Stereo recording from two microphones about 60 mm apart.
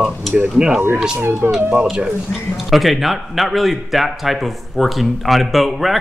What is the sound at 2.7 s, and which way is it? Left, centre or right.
A man's voice, centre.